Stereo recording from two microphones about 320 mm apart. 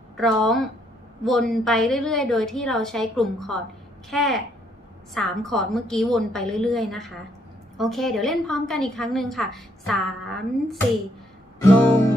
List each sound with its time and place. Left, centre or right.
0.2 s a woman's voice: centre